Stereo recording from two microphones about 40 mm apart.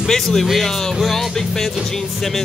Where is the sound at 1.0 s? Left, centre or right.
Centre.